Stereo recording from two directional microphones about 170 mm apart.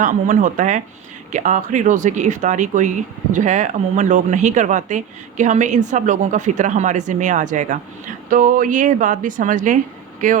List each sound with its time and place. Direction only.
0.0 s speech: 50° right (ahead or behind)